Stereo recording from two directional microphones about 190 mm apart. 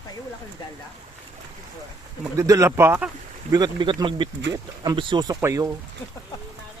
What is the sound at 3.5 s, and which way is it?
Speech, 20° right (ahead or behind).